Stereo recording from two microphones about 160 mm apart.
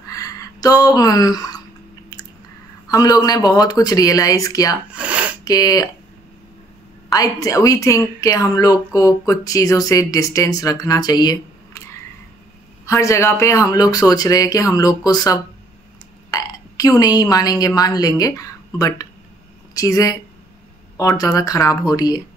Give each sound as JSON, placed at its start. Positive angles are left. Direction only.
{"t": 0.0, "sound": "a sound", "side_deg": 20}
{"t": 2.9, "sound": "a woman's voice", "side_deg": 25}
{"t": 4.9, "sound": "a sound", "side_deg": -10}
{"t": 5.4, "sound": "speech", "side_deg": 25}
{"t": 7.1, "sound": "a woman's voice", "side_deg": 20}
{"t": 12.8, "sound": "a woman's voice", "side_deg": 20}
{"t": 21.2, "sound": "a woman's voice", "side_deg": 20}